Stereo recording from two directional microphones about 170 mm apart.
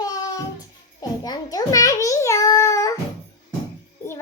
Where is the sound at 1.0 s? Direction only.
25° left (ahead or behind).